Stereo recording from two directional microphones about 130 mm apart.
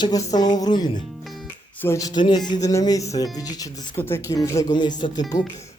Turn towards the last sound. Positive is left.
turn(degrees=30)  # may be behind; listen again after turning